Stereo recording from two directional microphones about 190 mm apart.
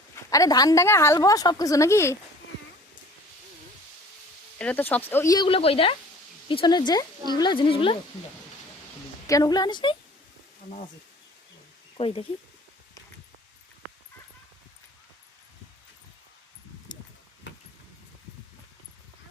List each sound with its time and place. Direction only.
0.3 s a woman's voice: 20° left (ahead or behind)
4.5 s a woman's voice: 10° left (ahead or behind); by 7.9 s 25° left (ahead or behind)
9.2 s speech: 20° left (ahead or behind)
11.9 s speech: 30° left (ahead or behind)
17.5 s vehicle: 70° left (ahead or behind)